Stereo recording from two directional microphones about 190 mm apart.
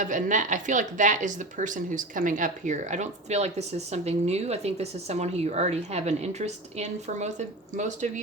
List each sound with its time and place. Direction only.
0.0 s speech: 40° right (ahead or behind)